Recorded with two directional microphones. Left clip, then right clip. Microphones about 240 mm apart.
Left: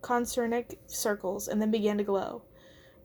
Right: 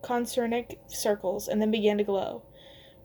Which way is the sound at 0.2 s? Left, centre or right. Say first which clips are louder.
Right 1 dB; left.